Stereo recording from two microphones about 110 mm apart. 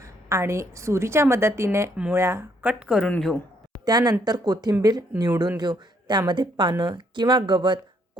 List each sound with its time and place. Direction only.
0.0 s a woman's voice: 25° right (ahead or behind); by 3.0 s 10° right (ahead or behind)
3.0 s speech: 5° left (ahead or behind)
3.8 s speech: 40° right (ahead or behind)